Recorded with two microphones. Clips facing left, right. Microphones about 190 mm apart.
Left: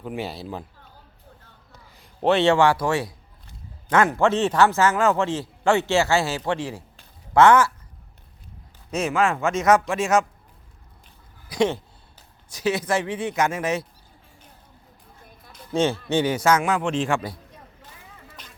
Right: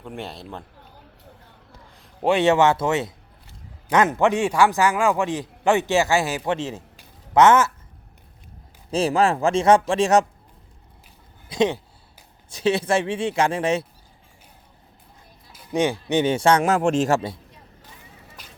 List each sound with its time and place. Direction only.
0.0 s speech: 5° left (ahead or behind)
2.2 s a man's voice: 15° right (ahead or behind)
8.9 s speech: 35° right (ahead or behind)
11.4 s speech: 20° right (ahead or behind)
15.7 s speech: 15° right (ahead or behind)
16.6 s speech: 45° right (ahead or behind)